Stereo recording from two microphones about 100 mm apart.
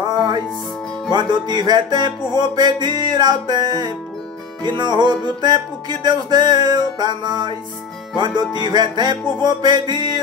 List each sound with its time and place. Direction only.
1.1 s music: 45° right (ahead or behind)